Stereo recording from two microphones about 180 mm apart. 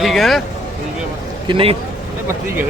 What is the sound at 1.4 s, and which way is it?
Speech, 30° right (ahead or behind).